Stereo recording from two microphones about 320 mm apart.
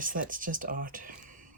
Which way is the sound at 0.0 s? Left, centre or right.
Right.